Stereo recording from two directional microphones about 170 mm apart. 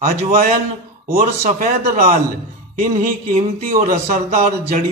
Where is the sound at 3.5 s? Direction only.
55° right (ahead or behind).